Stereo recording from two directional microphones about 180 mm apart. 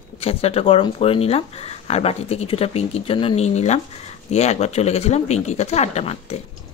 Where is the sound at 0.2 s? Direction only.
35° left (ahead or behind).